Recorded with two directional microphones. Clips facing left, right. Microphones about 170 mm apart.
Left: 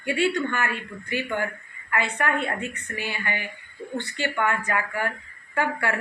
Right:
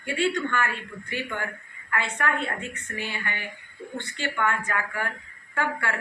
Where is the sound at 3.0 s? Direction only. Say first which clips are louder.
Left 3 dB; 15° left (ahead or behind).